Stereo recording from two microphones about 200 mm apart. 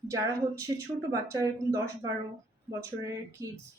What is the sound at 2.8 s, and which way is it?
Speech, 15° right (ahead or behind).